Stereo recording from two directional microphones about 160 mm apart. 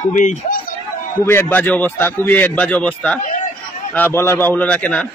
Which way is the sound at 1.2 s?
15° left (ahead or behind).